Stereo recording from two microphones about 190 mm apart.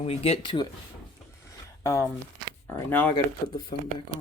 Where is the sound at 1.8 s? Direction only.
15° left (ahead or behind).